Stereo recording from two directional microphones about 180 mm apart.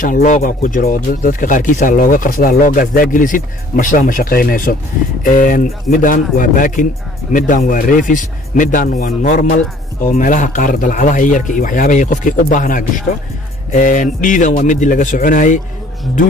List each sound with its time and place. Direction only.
0.0 s speech: 45° left (ahead or behind)